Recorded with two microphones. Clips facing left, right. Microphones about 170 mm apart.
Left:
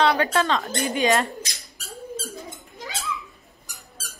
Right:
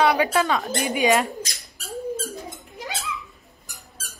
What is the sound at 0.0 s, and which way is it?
Speech, 5° right (ahead or behind).